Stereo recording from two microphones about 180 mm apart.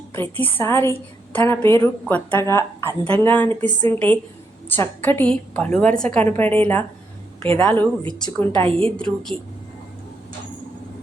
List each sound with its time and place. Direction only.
0.1 s a woman's voice: 10° left (ahead or behind)
8.6 s a woman's voice: 30° right (ahead or behind)
9.0 s speech: 5° left (ahead or behind)